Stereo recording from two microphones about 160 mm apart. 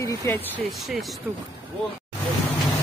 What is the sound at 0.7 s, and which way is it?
Speech, centre (ahead or behind).